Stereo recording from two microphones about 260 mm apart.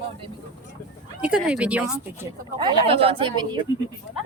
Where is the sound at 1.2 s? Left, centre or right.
Centre.